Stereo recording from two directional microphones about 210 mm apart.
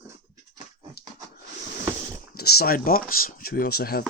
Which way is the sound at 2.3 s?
50° left (ahead or behind).